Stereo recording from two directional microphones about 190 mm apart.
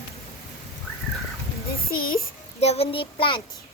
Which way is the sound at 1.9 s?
50° left (ahead or behind).